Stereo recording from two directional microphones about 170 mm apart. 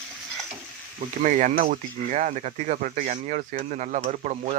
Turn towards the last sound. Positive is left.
turn(degrees=-45)  # may be behind; listen again after turning